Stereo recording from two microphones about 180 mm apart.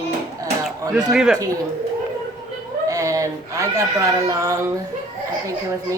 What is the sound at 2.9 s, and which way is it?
A woman's voice, 20° right (ahead or behind).